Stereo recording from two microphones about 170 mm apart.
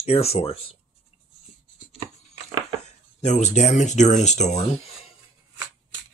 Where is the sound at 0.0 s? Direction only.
35° left (ahead or behind).